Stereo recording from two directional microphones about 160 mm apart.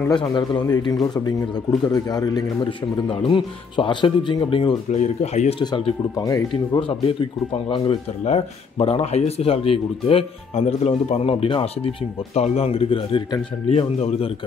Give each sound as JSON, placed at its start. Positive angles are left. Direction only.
{"t": 0.1, "sound": "a man's voice", "side_deg": 30}
{"t": 5.0, "sound": "speech", "side_deg": 45}
{"t": 5.6, "sound": "a man's voice", "side_deg": 25}